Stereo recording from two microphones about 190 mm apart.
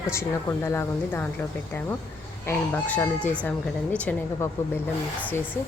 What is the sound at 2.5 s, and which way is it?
Speech, 10° left (ahead or behind).